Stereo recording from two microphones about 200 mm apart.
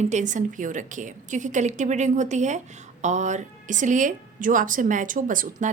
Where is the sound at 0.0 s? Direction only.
35° right (ahead or behind).